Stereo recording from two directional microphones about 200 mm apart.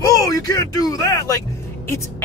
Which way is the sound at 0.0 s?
15° left (ahead or behind).